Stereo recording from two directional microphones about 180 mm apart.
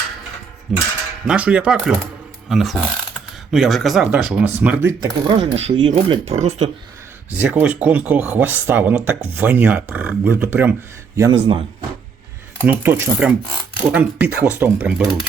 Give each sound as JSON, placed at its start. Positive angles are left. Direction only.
{"t": 0.7, "sound": "speech", "side_deg": 0}
{"t": 7.3, "sound": "speech", "side_deg": -10}
{"t": 11.2, "sound": "speech", "side_deg": -25}
{"t": 12.6, "sound": "speech", "side_deg": -10}